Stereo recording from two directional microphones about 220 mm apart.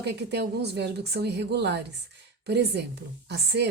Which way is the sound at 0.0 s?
50° right (ahead or behind).